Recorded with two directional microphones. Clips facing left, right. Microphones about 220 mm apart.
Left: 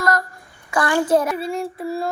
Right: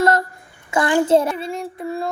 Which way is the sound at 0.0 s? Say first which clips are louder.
Right 4 dB; 25° right (ahead or behind).